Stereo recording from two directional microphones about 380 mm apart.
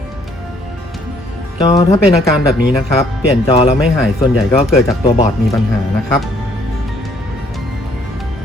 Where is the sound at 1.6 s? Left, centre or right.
Centre.